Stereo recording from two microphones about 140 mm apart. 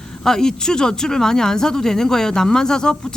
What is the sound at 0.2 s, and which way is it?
Speech, 5° left (ahead or behind).